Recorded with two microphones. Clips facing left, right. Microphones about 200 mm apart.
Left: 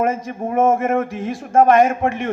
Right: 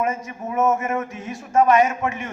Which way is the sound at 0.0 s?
50° left (ahead or behind).